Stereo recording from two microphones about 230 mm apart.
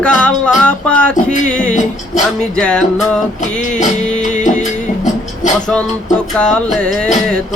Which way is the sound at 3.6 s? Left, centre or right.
Left.